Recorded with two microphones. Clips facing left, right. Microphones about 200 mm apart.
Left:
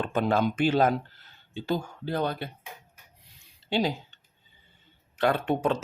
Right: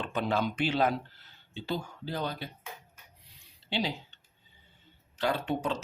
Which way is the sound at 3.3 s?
45° left (ahead or behind).